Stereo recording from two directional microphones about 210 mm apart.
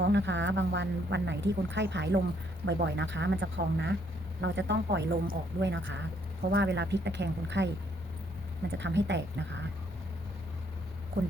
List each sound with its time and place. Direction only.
0.0 s speech: 55° right (ahead or behind)
8.8 s speech: 55° right (ahead or behind)